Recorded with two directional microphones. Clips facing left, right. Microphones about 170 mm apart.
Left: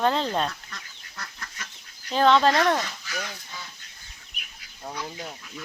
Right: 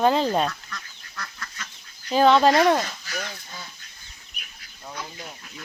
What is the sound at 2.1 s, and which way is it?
Speech, 10° right (ahead or behind).